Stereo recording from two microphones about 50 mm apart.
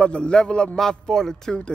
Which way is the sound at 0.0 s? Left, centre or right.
Centre.